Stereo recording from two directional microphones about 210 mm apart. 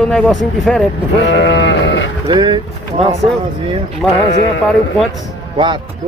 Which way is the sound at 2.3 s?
20° right (ahead or behind).